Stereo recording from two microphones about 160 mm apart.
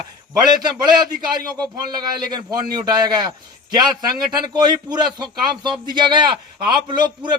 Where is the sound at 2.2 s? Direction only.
25° right (ahead or behind).